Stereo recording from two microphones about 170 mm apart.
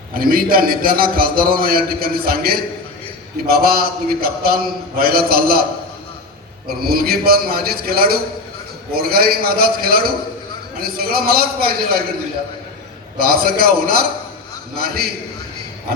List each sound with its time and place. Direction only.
0.1 s a man's voice: 60° right (ahead or behind)
6.8 s a man's voice: 60° right (ahead or behind)
13.1 s a man's voice: 60° right (ahead or behind)